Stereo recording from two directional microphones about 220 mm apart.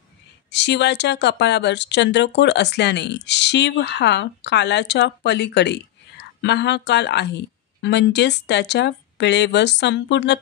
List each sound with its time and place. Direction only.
0.5 s speech: 50° left (ahead or behind)